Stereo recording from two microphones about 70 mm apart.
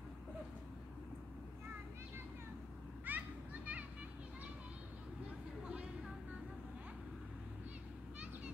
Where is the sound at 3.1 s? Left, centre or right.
Right.